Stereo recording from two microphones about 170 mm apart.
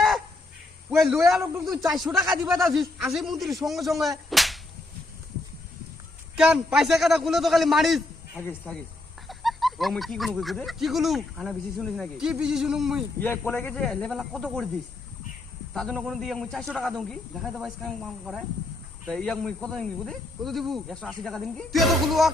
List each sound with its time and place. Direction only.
0.9 s a man's voice: centre (ahead or behind)
4.3 s whip: centre (ahead or behind)
6.3 s speech: 5° right (ahead or behind)
8.4 s speech: 10° left (ahead or behind)
9.2 s speech: centre (ahead or behind)
13.2 s speech: 10° left (ahead or behind)
15.7 s speech: 5° left (ahead or behind)